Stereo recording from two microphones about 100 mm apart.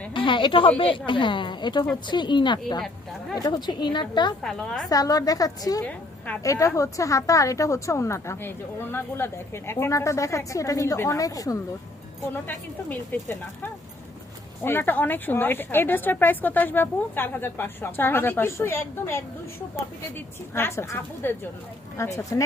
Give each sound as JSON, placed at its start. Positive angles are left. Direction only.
{"t": 0.1, "sound": "a woman's voice", "side_deg": 55}
{"t": 2.8, "sound": "a sound", "side_deg": 5}
{"t": 3.3, "sound": "a woman's voice", "side_deg": 40}
{"t": 4.4, "sound": "a woman's voice", "side_deg": 5}
{"t": 4.9, "sound": "a woman's voice", "side_deg": 35}
{"t": 5.8, "sound": "a woman's voice", "side_deg": 15}
{"t": 6.4, "sound": "a woman's voice", "side_deg": 35}
{"t": 12.3, "sound": "a woman's voice", "side_deg": 20}